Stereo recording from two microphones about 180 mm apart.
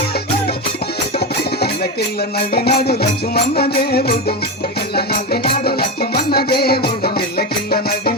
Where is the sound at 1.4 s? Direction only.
60° left (ahead or behind).